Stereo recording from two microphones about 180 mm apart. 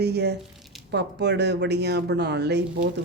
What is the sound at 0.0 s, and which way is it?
Speech, 65° right (ahead or behind).